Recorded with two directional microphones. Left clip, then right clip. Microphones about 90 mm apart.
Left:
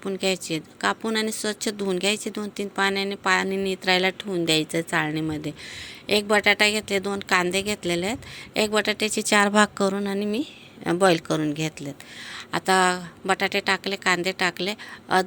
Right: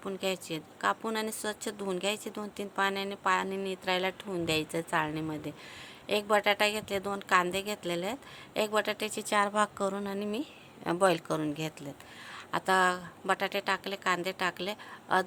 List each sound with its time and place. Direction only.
0.0 s a woman's voice: 15° left (ahead or behind)
4.2 s a woman's voice: 15° left (ahead or behind)
9.3 s a woman's voice: 40° left (ahead or behind)
9.8 s a woman's voice: 25° left (ahead or behind)